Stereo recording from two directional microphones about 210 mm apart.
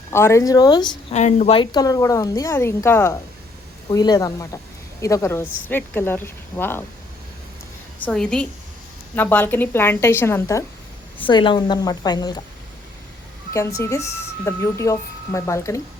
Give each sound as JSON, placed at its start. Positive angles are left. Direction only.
{"t": 0.1, "sound": "speech", "side_deg": 10}
{"t": 1.1, "sound": "speech", "side_deg": 35}
{"t": 7.9, "sound": "a woman's voice", "side_deg": 5}
{"t": 13.5, "sound": "speech", "side_deg": 15}